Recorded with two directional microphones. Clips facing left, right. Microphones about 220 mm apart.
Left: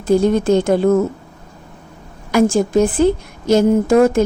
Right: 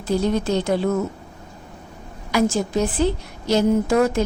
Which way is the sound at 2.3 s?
50° left (ahead or behind).